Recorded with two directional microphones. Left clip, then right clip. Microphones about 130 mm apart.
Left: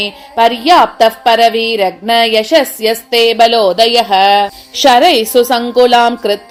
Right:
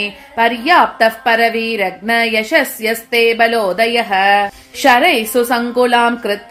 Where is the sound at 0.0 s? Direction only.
40° left (ahead or behind).